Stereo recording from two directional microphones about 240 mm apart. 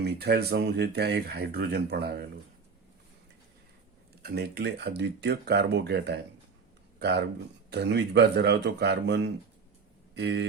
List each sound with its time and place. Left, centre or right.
0.0 s speech: right
4.2 s speech: right
7.7 s speech: right